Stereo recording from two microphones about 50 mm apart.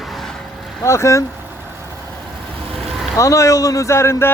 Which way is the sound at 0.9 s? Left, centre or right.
Left.